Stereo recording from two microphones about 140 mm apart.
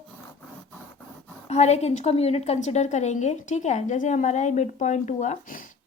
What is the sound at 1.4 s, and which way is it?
A woman's voice, 50° left (ahead or behind).